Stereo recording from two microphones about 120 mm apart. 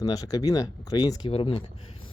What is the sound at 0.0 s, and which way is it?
Speech, 30° left (ahead or behind).